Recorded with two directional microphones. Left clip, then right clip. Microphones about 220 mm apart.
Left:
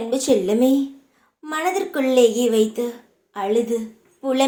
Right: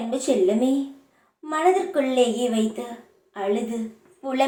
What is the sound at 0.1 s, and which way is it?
A woman's voice, 50° left (ahead or behind).